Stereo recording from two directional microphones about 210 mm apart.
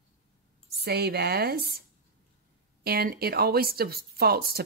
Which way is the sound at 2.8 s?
45° right (ahead or behind).